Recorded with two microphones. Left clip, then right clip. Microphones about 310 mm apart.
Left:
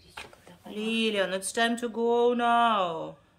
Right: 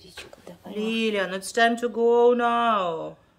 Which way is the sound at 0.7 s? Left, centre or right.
Centre.